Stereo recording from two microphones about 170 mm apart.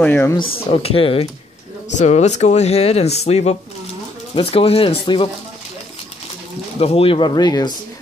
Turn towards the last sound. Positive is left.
turn(degrees=25)  # may be behind; listen again after turning